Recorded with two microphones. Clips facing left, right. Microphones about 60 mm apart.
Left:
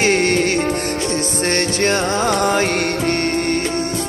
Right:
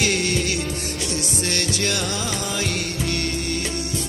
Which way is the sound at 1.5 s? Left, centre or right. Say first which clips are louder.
Left 8 dB; left.